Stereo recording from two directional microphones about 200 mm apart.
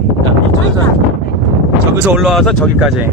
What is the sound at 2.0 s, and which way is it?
Speech, centre (ahead or behind).